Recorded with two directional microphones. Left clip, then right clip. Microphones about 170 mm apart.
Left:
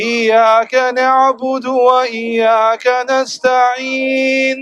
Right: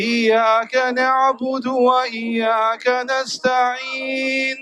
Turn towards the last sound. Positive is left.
turn(degrees=60)  # may be behind; listen again after turning